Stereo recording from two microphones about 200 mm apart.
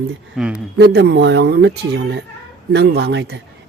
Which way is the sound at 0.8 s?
55° right (ahead or behind).